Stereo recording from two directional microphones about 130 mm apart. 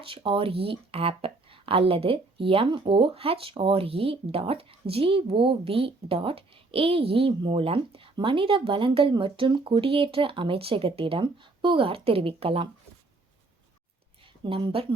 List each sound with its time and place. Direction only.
0.0 s speech: 45° right (ahead or behind)
14.4 s speech: 40° right (ahead or behind)